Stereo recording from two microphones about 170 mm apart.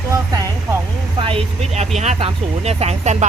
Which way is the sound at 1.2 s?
30° right (ahead or behind).